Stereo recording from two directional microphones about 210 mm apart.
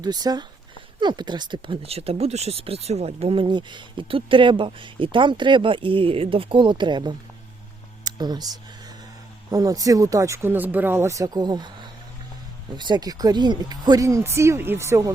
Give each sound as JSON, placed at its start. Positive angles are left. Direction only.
{"t": 0.0, "sound": "speech", "side_deg": -20}